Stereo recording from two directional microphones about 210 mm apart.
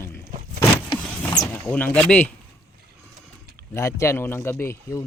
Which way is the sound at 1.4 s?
10° left (ahead or behind).